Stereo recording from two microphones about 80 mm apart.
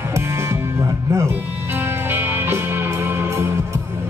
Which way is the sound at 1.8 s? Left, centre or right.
Right.